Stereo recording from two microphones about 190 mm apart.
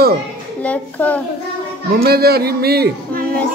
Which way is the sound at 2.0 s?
55° right (ahead or behind).